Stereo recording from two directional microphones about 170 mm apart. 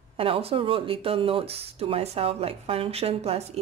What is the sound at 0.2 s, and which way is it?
Speech, 35° right (ahead or behind).